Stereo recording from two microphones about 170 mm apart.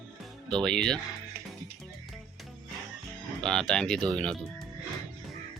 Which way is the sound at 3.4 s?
5° left (ahead or behind).